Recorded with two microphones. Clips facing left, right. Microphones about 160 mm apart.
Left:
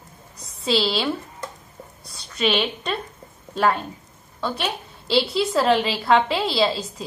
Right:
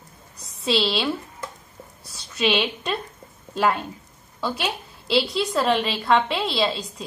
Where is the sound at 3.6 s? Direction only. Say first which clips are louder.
Left 1 dB; centre (ahead or behind).